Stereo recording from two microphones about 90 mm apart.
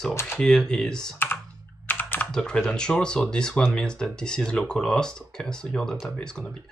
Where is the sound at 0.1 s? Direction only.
30° left (ahead or behind).